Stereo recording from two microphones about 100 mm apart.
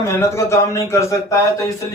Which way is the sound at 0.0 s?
30° left (ahead or behind).